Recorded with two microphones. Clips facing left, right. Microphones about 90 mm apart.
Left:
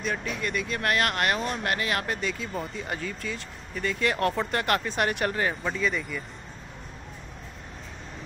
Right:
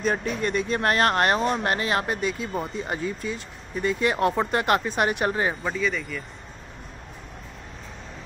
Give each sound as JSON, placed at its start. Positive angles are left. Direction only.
{"t": 0.0, "sound": "speech", "side_deg": -40}
{"t": 5.6, "sound": "speech", "side_deg": -5}